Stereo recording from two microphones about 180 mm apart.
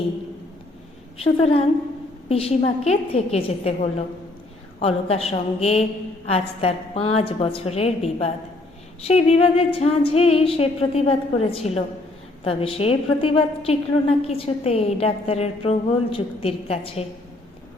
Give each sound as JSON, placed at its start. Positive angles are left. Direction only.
{"t": 1.2, "sound": "a woman's voice", "side_deg": 35}